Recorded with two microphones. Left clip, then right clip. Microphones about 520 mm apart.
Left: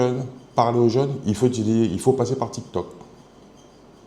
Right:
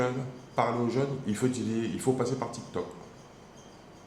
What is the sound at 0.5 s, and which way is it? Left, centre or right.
A man's voice, left.